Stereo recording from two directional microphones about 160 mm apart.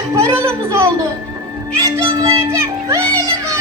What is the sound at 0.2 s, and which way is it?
A child's voice, 15° right (ahead or behind).